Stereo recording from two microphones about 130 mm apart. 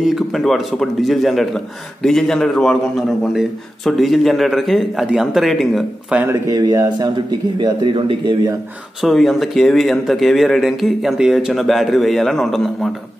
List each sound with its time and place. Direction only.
0.0 s a man's voice: centre (ahead or behind)
6.1 s speech: 20° right (ahead or behind)
6.5 s a man's voice: 30° right (ahead or behind)
9.0 s a man's voice: centre (ahead or behind)